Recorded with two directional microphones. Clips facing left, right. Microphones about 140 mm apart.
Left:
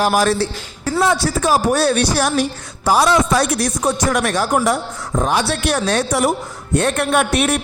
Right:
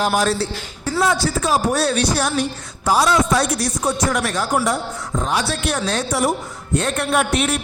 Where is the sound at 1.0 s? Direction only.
60° left (ahead or behind).